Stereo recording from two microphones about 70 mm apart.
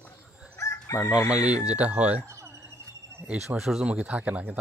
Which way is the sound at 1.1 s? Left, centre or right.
Left.